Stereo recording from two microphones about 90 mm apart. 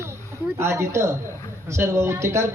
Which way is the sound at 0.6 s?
30° right (ahead or behind).